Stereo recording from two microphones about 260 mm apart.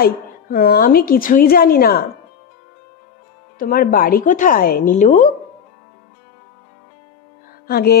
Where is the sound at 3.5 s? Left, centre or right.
Left.